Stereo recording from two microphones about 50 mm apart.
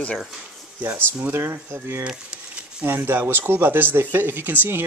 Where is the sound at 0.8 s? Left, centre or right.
Right.